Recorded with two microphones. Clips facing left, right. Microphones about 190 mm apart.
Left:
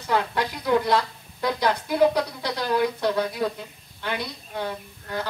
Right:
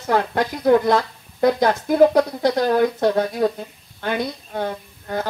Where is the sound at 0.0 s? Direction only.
45° right (ahead or behind).